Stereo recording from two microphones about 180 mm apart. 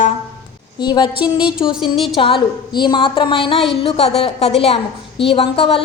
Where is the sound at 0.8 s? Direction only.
25° left (ahead or behind).